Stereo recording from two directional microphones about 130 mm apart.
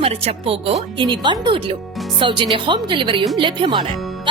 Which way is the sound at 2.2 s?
40° right (ahead or behind).